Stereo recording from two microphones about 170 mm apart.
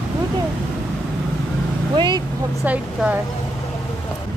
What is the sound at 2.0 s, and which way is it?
Speech, 25° right (ahead or behind).